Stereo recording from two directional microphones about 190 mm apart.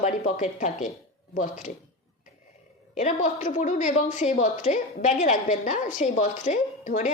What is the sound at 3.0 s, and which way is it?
A woman's voice, 40° left (ahead or behind).